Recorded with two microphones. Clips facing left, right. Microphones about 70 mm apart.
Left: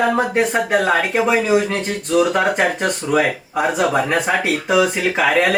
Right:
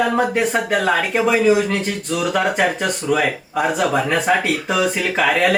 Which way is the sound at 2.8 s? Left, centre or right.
Centre.